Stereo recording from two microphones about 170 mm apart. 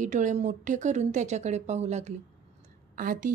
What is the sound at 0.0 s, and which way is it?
A woman's voice, 45° right (ahead or behind).